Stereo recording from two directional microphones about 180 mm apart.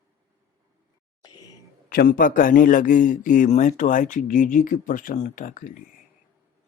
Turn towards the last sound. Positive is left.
turn(degrees=45)  # may be behind; listen again after turning